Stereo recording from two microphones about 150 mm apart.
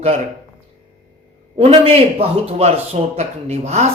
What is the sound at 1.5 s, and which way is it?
Speech, 40° right (ahead or behind).